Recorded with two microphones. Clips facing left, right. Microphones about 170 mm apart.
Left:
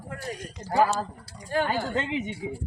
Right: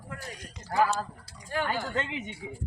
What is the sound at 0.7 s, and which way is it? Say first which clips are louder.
Speech: left 3 dB; 35° left (ahead or behind).